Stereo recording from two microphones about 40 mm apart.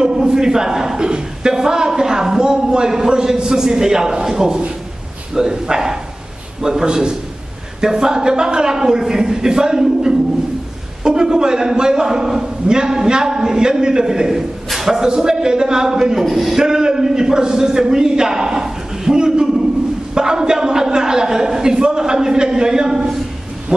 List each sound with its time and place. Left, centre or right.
0.0 s a man's voice: centre
15.0 s a man's voice: centre
16.3 s a man's voice: centre
16.6 s a man's voice: centre